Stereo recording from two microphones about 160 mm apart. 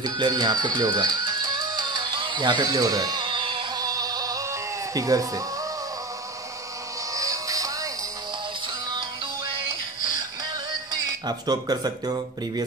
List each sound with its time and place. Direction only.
0.0 s music: 25° right (ahead or behind)
7.2 s music: 20° right (ahead or behind)
11.2 s speech: 25° right (ahead or behind)